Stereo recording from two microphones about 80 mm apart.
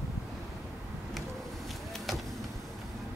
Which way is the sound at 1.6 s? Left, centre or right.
Centre.